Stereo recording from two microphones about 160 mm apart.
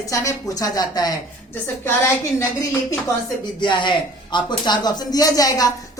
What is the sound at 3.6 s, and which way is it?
Speech, 30° left (ahead or behind).